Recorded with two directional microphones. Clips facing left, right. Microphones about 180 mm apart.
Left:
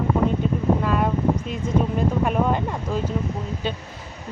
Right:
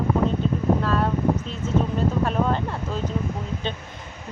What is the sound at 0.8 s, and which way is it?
Speech, 15° left (ahead or behind).